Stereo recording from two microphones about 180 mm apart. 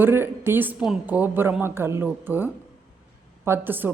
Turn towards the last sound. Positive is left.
turn(degrees=-10)  # may be behind; listen again after turning